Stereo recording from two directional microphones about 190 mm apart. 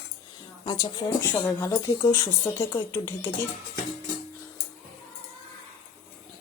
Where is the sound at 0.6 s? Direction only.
20° left (ahead or behind).